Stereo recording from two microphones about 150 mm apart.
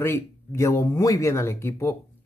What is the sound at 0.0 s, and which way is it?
Speech, 15° left (ahead or behind).